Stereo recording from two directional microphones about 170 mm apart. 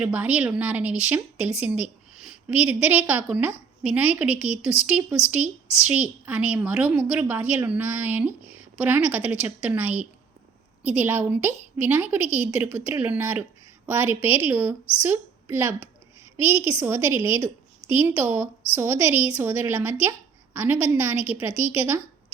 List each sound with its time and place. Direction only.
0.0 s a woman's voice: 10° right (ahead or behind)
16.5 s a woman's voice: 30° left (ahead or behind)
16.8 s a woman's voice: 15° right (ahead or behind)